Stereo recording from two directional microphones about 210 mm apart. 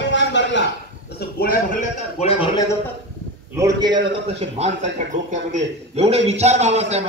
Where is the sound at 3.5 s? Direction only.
15° right (ahead or behind).